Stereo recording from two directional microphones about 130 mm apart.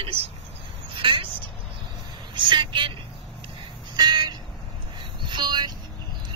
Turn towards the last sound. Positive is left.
turn(degrees=-35)  # may be behind; listen again after turning